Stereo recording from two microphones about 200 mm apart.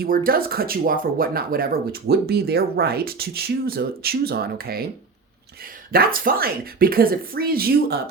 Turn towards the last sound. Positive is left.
turn(degrees=-50)  # may be behind; listen again after turning